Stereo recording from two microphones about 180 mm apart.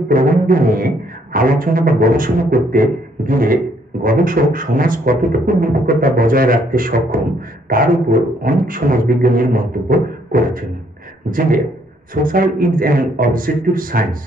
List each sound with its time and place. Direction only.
0.1 s a man's voice: 50° right (ahead or behind)